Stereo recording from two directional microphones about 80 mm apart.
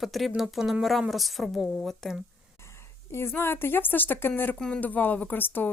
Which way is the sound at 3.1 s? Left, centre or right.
Left.